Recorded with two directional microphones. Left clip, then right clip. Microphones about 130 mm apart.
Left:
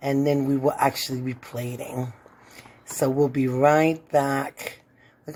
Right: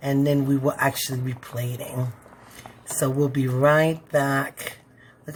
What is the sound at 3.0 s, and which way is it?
Speech, 35° left (ahead or behind).